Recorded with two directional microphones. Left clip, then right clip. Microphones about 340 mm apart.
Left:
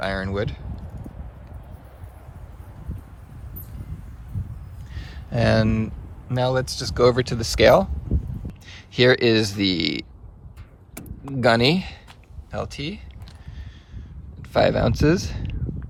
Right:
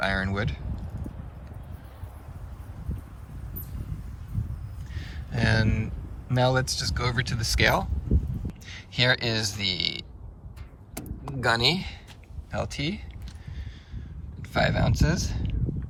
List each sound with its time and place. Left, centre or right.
0.0 s speech: centre
4.9 s speech: centre
11.3 s speech: centre
12.5 s speech: centre
14.5 s speech: centre